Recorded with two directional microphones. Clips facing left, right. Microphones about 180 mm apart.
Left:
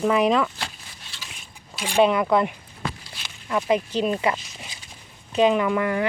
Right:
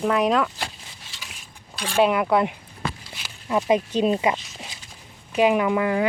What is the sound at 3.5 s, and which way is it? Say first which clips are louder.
Speech: right 2 dB; 20° right (ahead or behind).